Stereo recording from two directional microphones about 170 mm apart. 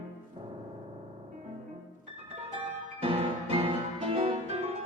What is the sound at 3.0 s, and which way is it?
Music, 35° right (ahead or behind).